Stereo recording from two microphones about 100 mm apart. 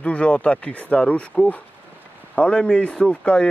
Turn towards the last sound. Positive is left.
turn(degrees=10)  # may be behind; listen again after turning